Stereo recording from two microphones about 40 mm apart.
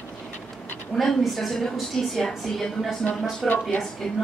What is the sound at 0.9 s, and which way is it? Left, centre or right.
A woman's voice, centre.